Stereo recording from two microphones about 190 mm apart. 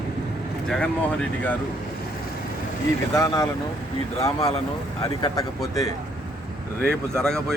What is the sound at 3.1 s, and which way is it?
Speech, 20° left (ahead or behind).